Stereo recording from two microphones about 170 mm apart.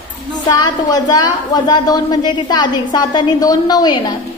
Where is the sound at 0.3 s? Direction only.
25° left (ahead or behind).